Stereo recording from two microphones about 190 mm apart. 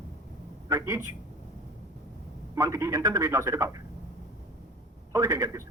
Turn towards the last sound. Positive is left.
turn(degrees=-15)  # may be behind; listen again after turning